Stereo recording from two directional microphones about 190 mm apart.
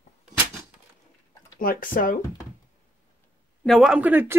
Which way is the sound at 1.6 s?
45° left (ahead or behind).